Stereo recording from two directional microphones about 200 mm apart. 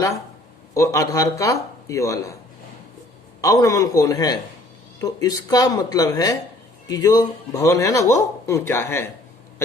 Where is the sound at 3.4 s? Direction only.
15° left (ahead or behind).